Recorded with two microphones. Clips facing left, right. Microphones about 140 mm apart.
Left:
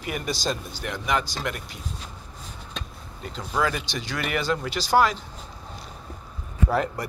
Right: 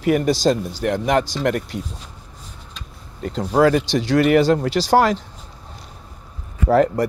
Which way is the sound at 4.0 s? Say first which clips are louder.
Right 14 dB; 90° right.